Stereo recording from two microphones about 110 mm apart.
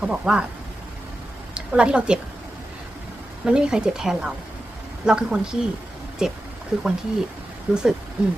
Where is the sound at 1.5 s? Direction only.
10° right (ahead or behind).